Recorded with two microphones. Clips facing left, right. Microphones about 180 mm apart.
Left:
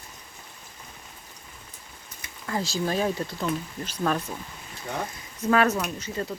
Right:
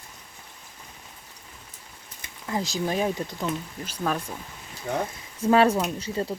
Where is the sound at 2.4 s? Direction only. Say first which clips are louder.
Even; 15° right (ahead or behind).